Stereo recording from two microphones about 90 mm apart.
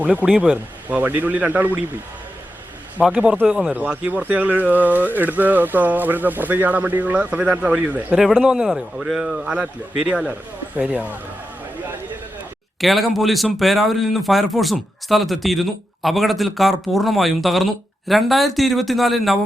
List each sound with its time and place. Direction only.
0.0 s speech: 15° right (ahead or behind)
3.1 s speech: 10° right (ahead or behind)
8.2 s speech: centre (ahead or behind)
12.8 s speech: centre (ahead or behind)